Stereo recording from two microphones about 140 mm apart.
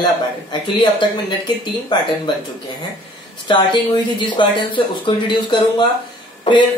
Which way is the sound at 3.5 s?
35° left (ahead or behind).